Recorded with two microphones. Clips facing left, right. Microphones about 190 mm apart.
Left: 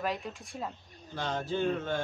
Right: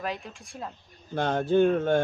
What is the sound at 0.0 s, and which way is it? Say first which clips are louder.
Speech: even; centre (ahead or behind).